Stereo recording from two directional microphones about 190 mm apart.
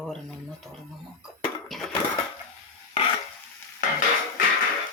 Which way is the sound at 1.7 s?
Centre (ahead or behind).